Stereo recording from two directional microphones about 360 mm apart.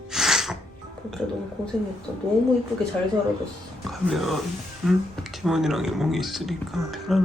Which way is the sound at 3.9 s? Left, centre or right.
Centre.